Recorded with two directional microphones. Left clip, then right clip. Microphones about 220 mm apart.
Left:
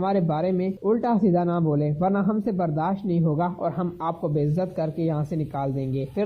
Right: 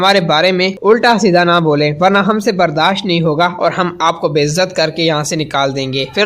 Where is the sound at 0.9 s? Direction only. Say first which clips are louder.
Right 13 dB; 25° right (ahead or behind).